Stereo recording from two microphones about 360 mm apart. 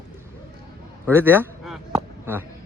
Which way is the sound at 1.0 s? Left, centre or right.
Centre.